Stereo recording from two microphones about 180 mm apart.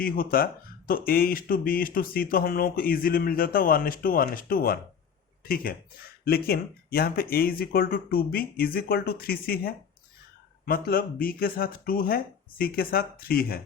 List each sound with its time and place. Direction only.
0.0 s speech: 55° left (ahead or behind)